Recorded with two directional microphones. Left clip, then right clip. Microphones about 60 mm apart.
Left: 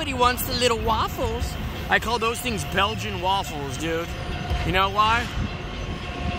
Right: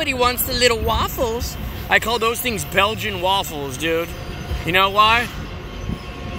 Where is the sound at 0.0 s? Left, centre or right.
Centre.